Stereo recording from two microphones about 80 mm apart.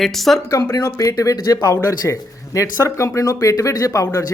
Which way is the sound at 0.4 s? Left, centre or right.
Left.